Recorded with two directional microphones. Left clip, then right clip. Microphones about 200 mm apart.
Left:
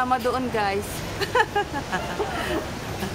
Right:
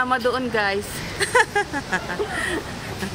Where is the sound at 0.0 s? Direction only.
20° right (ahead or behind).